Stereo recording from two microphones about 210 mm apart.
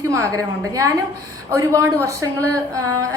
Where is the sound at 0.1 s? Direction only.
15° right (ahead or behind).